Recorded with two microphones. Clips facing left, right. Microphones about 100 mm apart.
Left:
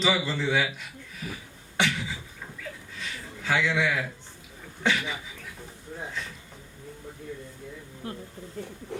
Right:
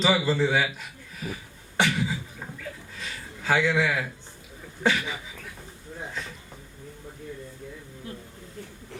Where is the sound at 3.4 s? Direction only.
40° right (ahead or behind).